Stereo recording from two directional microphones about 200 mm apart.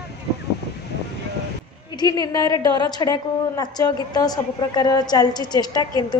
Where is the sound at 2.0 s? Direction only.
20° left (ahead or behind).